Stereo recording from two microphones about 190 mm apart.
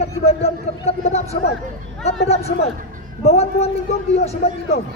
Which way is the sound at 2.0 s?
35° left (ahead or behind).